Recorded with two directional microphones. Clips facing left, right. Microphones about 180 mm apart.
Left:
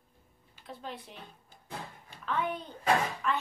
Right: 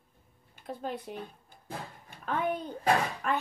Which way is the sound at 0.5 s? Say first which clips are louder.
Right 6 dB; 50° right (ahead or behind).